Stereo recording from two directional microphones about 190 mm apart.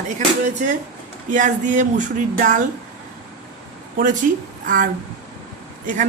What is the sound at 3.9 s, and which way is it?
Speech, 45° right (ahead or behind).